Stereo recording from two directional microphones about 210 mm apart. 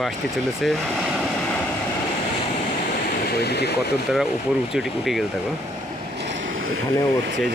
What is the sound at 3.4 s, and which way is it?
Speech, 50° left (ahead or behind).